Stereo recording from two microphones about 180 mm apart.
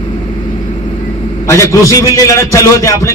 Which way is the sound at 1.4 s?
15° left (ahead or behind).